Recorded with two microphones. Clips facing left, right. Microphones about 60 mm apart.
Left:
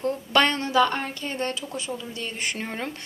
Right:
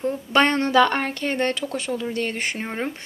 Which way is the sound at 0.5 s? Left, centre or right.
Right.